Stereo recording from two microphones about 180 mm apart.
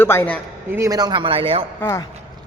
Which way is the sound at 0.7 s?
15° right (ahead or behind).